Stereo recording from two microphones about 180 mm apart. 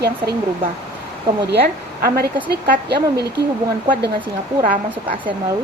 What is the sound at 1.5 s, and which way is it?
A woman's voice, 65° right (ahead or behind).